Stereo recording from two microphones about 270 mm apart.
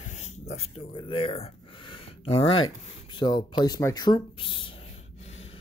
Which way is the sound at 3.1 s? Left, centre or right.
Centre.